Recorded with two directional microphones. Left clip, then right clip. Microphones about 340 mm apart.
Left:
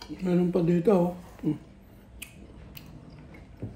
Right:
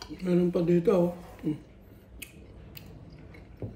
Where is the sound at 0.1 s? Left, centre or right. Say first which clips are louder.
Even; centre.